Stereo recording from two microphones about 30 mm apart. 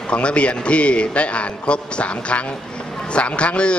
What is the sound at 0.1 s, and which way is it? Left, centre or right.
A man's voice, left.